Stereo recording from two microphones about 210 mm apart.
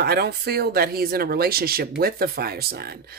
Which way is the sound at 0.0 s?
50° right (ahead or behind).